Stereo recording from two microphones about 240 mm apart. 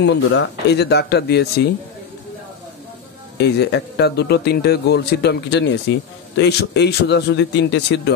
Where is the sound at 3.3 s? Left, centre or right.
Left.